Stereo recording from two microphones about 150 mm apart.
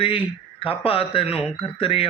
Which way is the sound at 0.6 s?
40° left (ahead or behind).